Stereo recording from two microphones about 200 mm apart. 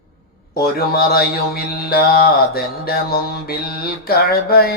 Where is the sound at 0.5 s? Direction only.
50° left (ahead or behind).